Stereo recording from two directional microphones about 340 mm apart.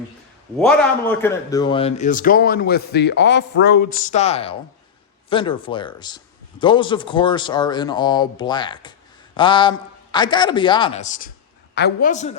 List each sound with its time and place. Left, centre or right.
0.6 s a man's voice: centre